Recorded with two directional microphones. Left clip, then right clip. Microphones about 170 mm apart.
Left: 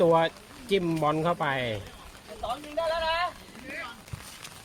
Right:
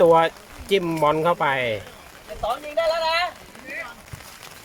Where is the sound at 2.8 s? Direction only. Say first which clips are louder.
Right 6 dB; 50° right (ahead or behind).